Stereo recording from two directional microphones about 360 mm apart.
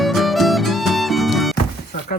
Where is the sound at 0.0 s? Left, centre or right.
Centre.